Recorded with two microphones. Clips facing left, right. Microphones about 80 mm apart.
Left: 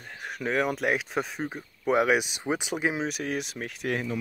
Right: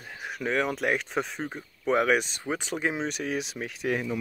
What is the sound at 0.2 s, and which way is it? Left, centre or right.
Speech, centre.